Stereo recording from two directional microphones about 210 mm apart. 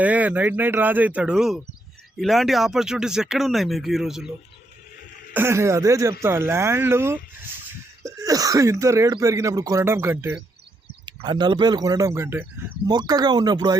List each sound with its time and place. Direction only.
0.0 s speech: 5° right (ahead or behind)
5.3 s speech: 10° right (ahead or behind)
11.0 s speech: 20° right (ahead or behind)